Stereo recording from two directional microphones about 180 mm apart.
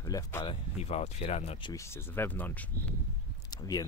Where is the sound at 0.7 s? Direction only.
35° left (ahead or behind).